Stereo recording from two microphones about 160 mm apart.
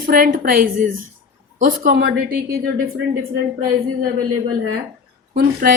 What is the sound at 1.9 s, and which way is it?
Speech, 85° right.